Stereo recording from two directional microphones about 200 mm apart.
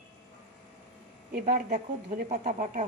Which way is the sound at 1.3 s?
40° right (ahead or behind).